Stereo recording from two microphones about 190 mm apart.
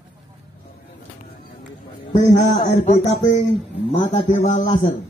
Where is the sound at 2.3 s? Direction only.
45° left (ahead or behind).